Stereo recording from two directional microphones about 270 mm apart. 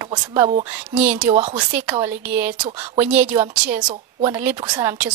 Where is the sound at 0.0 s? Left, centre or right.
Centre.